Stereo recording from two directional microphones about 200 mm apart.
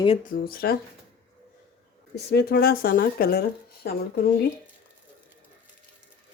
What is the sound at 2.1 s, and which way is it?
Speech, 55° left (ahead or behind).